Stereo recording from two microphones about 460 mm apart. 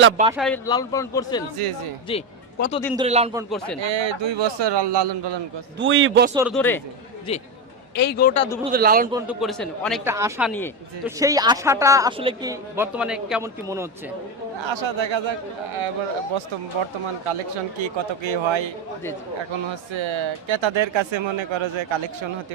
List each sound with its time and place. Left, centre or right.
0.3 s a man's voice: centre
2.0 s a sound: centre
2.9 s speech: centre
3.8 s speech: right
5.8 s speech: right
6.3 s a man's voice: centre
8.7 s speech: centre
9.1 s speech: centre
14.6 s speech: right
17.7 s speech: right
19.9 s speech: right